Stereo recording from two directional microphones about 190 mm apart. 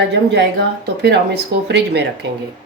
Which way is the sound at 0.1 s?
65° right (ahead or behind).